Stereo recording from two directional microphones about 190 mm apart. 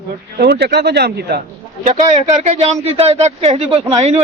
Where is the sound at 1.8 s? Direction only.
35° right (ahead or behind).